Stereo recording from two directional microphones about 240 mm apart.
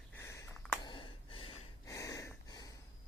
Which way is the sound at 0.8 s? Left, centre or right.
Centre.